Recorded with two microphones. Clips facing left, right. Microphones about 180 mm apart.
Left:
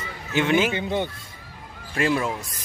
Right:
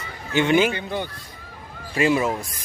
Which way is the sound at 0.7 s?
20° left (ahead or behind).